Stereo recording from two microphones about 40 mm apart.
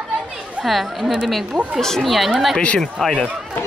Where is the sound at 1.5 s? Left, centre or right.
Right.